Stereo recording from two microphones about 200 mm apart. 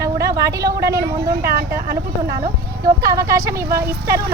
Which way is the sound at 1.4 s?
50° right (ahead or behind).